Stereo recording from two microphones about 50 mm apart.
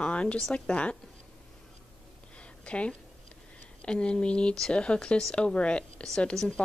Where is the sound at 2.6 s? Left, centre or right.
Left.